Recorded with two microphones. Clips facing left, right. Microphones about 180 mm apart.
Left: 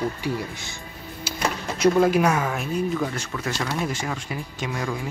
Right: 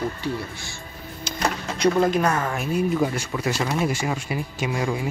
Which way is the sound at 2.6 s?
10° right (ahead or behind).